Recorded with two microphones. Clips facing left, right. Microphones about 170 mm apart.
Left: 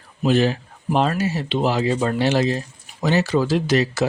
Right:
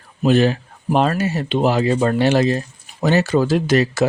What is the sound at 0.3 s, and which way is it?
Speech, 55° right (ahead or behind).